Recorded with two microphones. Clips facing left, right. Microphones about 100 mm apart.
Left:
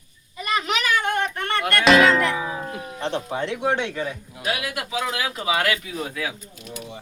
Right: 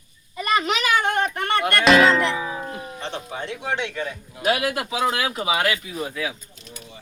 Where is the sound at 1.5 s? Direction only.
Centre (ahead or behind).